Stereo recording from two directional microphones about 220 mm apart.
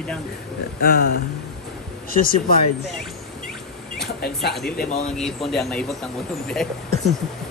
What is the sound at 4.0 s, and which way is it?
Speech, 45° left (ahead or behind).